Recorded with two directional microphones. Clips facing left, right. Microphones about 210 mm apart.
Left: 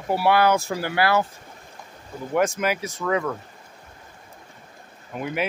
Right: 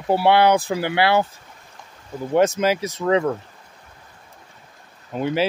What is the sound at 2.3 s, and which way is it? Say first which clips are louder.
Speech: right 5 dB; 25° right (ahead or behind).